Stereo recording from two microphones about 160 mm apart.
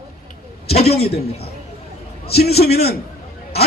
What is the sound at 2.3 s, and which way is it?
Speech, 85° left.